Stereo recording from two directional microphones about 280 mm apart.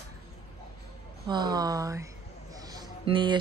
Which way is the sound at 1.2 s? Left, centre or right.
Centre.